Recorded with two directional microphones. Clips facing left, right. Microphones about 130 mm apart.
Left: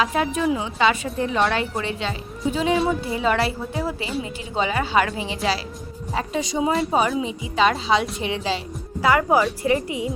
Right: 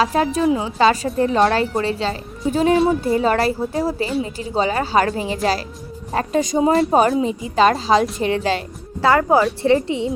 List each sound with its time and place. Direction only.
0.0 s a woman's voice: 35° right (ahead or behind)
9.8 s a woman's voice: 25° right (ahead or behind)